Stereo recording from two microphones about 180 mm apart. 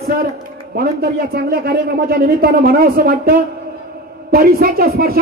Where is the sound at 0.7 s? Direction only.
55° right (ahead or behind).